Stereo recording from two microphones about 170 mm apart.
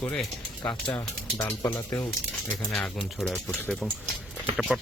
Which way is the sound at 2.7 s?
Centre (ahead or behind).